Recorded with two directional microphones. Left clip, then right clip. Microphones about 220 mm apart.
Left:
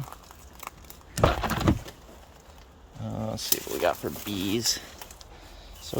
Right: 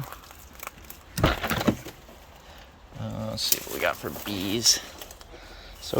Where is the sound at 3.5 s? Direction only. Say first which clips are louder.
Left 3 dB; 20° left (ahead or behind).